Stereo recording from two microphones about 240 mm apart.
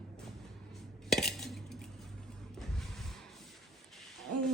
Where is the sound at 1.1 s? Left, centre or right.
Centre.